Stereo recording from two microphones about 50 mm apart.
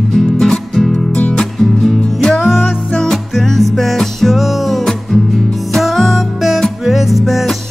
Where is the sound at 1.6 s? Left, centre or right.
Centre.